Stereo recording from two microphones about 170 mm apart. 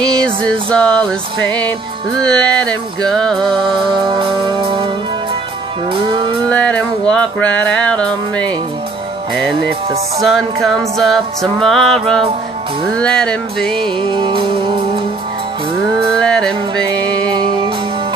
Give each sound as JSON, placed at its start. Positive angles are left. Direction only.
{"t": 0.2, "sound": "music", "side_deg": 5}
{"t": 2.3, "sound": "music", "side_deg": 5}
{"t": 3.7, "sound": "music", "side_deg": -30}
{"t": 6.5, "sound": "music", "side_deg": 5}
{"t": 10.2, "sound": "music", "side_deg": 0}
{"t": 13.8, "sound": "music", "side_deg": -30}
{"t": 16.2, "sound": "music", "side_deg": 5}